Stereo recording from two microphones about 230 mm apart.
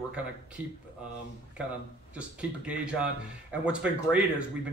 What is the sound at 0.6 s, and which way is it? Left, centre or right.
Speech, centre.